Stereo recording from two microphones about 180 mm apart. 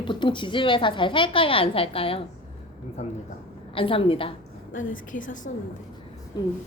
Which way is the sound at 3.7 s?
30° left (ahead or behind).